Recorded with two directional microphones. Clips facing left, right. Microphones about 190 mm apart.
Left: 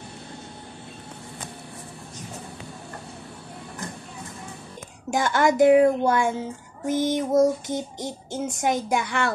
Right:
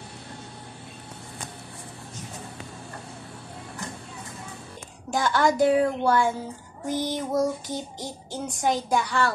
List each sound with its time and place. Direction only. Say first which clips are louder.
5.1 s child singing: left 2 dB; 20° left (ahead or behind)